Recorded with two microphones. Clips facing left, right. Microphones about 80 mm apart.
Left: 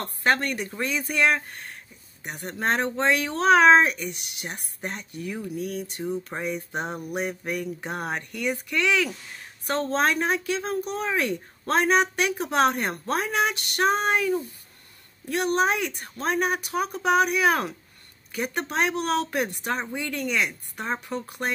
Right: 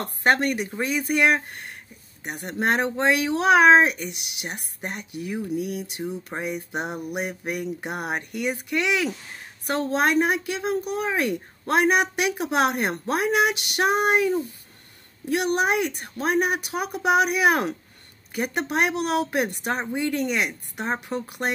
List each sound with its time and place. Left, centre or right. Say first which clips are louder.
0.0 s speech: right 3 dB; centre